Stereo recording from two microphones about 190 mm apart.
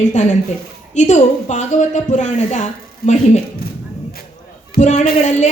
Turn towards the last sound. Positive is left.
turn(degrees=35)  # may be behind; listen again after turning